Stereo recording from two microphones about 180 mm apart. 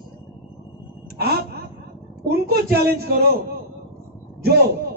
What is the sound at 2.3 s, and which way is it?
Speech, 60° right (ahead or behind).